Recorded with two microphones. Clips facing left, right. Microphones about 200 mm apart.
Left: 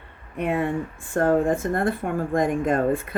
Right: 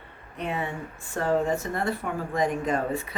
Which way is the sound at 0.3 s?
55° left (ahead or behind).